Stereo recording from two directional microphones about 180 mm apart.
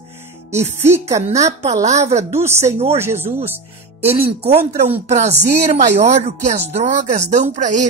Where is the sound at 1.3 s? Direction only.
40° right (ahead or behind).